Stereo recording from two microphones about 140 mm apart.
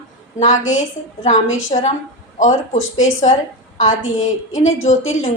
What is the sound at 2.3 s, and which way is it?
A woman's voice, 60° left (ahead or behind).